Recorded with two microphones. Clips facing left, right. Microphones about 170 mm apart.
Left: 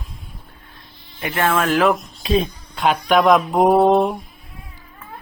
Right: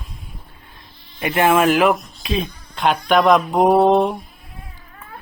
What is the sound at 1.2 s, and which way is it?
Speech, 15° right (ahead or behind).